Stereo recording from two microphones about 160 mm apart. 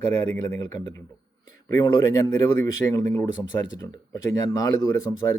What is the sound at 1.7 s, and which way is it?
Speech, 25° left (ahead or behind).